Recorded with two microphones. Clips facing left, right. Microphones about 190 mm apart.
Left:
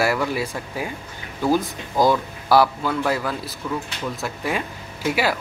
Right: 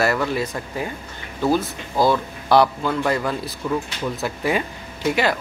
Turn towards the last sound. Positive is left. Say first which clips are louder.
# right 2 dB
turn(degrees=5)  # may be behind; listen again after turning